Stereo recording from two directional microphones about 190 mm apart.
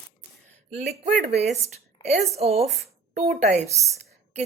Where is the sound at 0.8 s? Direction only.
40° right (ahead or behind).